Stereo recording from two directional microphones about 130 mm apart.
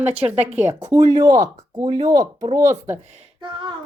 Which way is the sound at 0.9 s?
30° right (ahead or behind).